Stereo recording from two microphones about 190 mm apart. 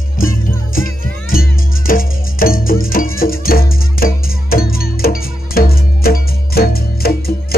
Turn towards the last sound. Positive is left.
turn(degrees=55)  # may be behind; listen again after turning